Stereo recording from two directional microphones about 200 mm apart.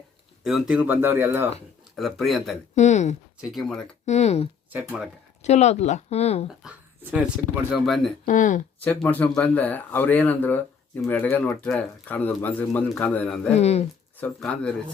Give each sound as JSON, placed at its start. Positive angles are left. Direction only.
{"t": 0.4, "sound": "speech", "side_deg": 0}
{"t": 2.0, "sound": "speech", "side_deg": 0}
{"t": 2.7, "sound": "speech", "side_deg": 35}
{"t": 3.5, "sound": "speech", "side_deg": 0}
{"t": 4.0, "sound": "speech", "side_deg": 35}
{"t": 4.7, "sound": "speech", "side_deg": -10}
{"t": 5.4, "sound": "speech", "side_deg": 35}
{"t": 6.5, "sound": "speech", "side_deg": -5}
{"t": 8.2, "sound": "speech", "side_deg": 40}
{"t": 8.8, "sound": "speech", "side_deg": 10}
{"t": 13.5, "sound": "speech", "side_deg": 35}
{"t": 14.2, "sound": "speech", "side_deg": 5}